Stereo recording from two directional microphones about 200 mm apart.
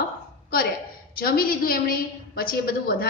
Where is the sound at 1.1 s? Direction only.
45° left (ahead or behind).